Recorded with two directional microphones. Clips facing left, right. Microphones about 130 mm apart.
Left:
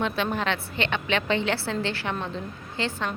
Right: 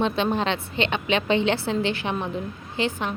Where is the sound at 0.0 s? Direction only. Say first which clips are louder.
Right 3 dB; 20° right (ahead or behind).